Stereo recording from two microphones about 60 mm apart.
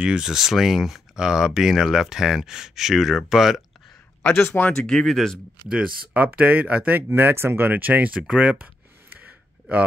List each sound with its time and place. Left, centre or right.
0.0 s speech: centre
4.3 s speech: left
4.6 s speech: centre
6.1 s speech: right
9.2 s a sound: right